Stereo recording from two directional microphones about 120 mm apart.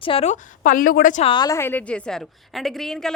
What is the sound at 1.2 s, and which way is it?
Speech, 40° left (ahead or behind).